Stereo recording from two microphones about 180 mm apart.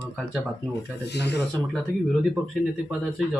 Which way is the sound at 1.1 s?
70° left (ahead or behind).